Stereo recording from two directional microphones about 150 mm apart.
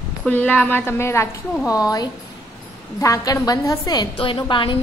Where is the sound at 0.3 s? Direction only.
10° left (ahead or behind).